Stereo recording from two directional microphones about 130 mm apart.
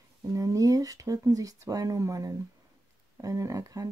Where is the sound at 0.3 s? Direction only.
25° right (ahead or behind).